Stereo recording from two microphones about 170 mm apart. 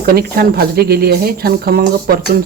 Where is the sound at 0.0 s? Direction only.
65° right (ahead or behind).